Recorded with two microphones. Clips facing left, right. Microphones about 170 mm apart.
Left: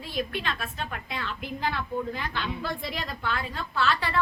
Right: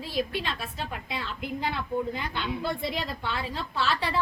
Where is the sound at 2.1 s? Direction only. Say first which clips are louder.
Right 1 dB; 20° right (ahead or behind).